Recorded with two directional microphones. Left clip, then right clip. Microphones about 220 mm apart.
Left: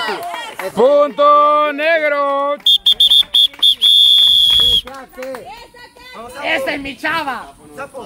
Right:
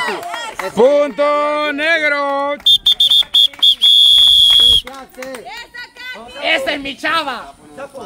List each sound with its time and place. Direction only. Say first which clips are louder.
0.0 s speech: right 1 dB; 15° right (ahead or behind)
4.2 s fire alarm: right 2 dB; 10° right (ahead or behind)
6.4 s a woman's voice: right 2 dB; 15° left (ahead or behind)